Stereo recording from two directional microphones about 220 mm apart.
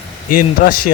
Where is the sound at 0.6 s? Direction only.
40° left (ahead or behind).